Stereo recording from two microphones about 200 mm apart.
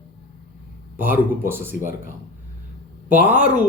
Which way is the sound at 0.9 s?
10° right (ahead or behind).